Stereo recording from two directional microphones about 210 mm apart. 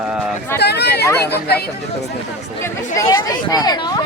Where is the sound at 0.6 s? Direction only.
50° left (ahead or behind).